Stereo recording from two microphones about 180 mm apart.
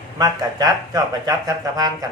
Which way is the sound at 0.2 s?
20° right (ahead or behind).